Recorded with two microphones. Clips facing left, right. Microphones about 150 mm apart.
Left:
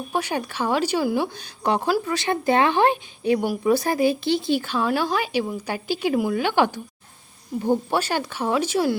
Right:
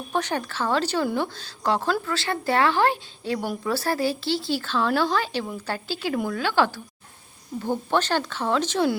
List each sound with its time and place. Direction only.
0.1 s a woman's voice: 10° left (ahead or behind)